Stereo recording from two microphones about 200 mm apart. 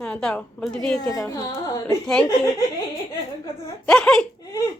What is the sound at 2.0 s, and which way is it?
Speech, 5° left (ahead or behind).